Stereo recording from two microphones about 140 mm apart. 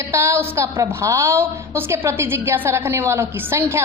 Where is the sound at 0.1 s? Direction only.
20° right (ahead or behind).